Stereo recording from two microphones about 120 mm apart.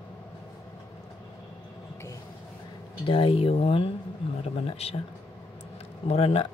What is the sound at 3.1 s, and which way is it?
Speech, 50° left (ahead or behind).